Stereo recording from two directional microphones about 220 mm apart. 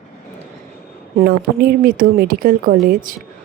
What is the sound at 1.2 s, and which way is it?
Speech, 45° right (ahead or behind).